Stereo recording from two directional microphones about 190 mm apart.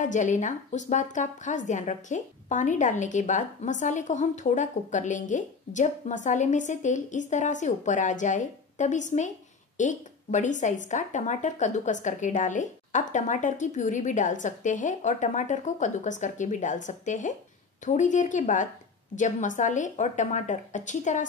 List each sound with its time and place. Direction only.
0.0 s a woman's voice: 40° left (ahead or behind)